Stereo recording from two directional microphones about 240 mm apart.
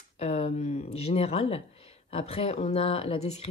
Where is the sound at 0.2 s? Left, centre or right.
Left.